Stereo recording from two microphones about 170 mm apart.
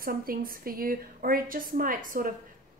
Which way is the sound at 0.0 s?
55° right (ahead or behind).